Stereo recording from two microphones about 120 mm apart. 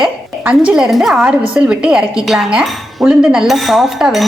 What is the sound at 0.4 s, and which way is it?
A woman's voice, 10° right (ahead or behind).